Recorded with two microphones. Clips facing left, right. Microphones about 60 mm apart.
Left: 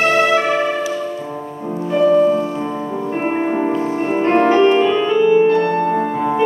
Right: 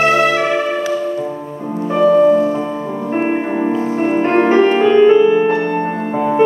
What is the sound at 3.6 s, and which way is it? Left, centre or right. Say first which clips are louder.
Music: right 2 dB; centre.